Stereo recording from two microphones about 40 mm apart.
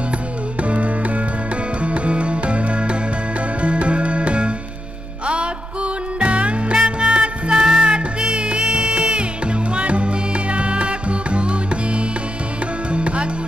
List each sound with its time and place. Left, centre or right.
0.6 s music: right